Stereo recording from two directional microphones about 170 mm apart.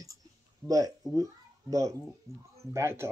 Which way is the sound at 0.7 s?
20° right (ahead or behind).